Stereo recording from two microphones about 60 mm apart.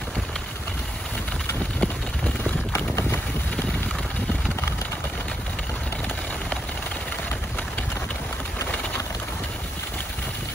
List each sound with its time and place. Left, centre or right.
1.8 s vehicle: centre